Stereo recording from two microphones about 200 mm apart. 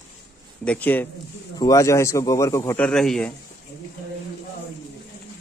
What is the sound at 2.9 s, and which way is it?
Speech, 5° left (ahead or behind).